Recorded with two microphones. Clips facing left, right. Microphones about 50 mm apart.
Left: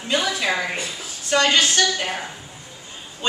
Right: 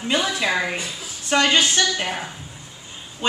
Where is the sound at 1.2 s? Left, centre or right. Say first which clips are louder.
Even; right.